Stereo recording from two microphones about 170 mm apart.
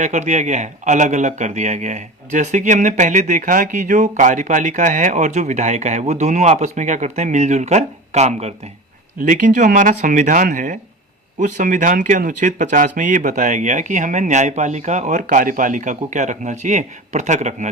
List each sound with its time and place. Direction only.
0.0 s speech: 45° right (ahead or behind)